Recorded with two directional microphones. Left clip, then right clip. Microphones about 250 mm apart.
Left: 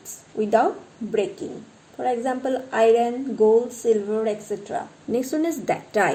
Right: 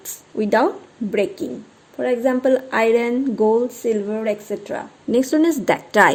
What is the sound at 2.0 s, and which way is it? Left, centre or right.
A woman's voice, right.